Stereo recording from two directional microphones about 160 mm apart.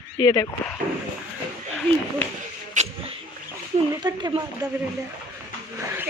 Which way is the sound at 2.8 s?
50° right (ahead or behind).